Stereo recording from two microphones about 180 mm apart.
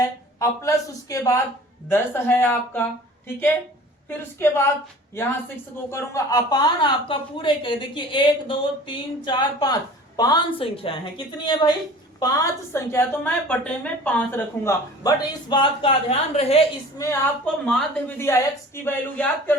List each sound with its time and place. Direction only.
0.0 s a woman's voice: 15° left (ahead or behind)
4.4 s a woman's voice: 15° left (ahead or behind)
5.9 s speech: 20° left (ahead or behind)
12.7 s a woman's voice: 15° left (ahead or behind); by 16.6 s 35° left (ahead or behind)
17.0 s a woman's voice: 15° left (ahead or behind)
17.7 s speech: centre (ahead or behind)
18.2 s a woman's voice: 15° left (ahead or behind)